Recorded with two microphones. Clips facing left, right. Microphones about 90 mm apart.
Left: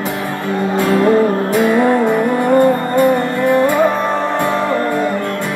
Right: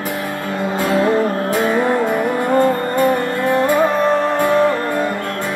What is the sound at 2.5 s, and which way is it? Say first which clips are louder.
Music: left 3 dB; 15° left (ahead or behind).